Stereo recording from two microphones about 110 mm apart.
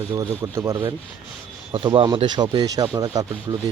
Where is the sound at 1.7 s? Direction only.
45° right (ahead or behind).